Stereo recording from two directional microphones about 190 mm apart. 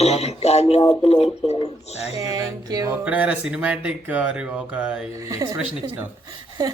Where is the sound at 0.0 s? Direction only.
35° left (ahead or behind).